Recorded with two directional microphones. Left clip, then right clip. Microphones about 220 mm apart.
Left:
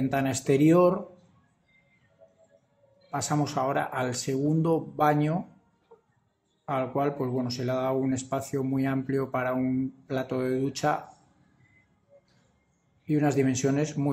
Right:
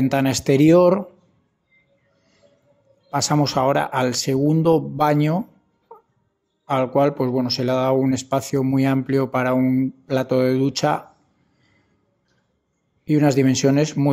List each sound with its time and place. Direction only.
0.0 s speech: 45° right (ahead or behind)
3.1 s speech: 45° right (ahead or behind)
5.9 s music: 40° right (ahead or behind)
6.6 s speech: 45° right (ahead or behind)
13.0 s speech: 40° right (ahead or behind)